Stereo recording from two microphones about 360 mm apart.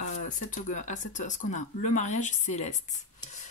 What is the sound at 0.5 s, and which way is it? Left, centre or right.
Speech, left.